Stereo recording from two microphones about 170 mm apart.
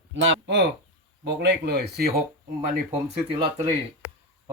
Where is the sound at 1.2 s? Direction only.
75° right (ahead or behind).